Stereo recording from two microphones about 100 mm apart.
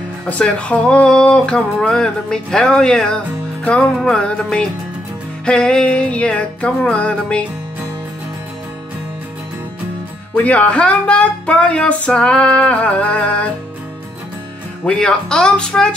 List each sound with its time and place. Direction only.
0.3 s speech: 10° left (ahead or behind)
10.3 s speech: 15° left (ahead or behind)
14.9 s speech: 10° left (ahead or behind)